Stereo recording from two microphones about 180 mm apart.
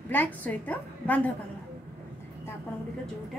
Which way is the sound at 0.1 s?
10° left (ahead or behind).